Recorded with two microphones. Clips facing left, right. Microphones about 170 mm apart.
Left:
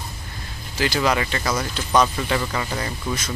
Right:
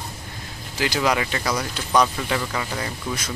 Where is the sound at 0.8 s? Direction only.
10° right (ahead or behind).